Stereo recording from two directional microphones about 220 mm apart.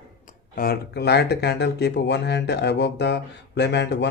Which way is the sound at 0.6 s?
45° left (ahead or behind).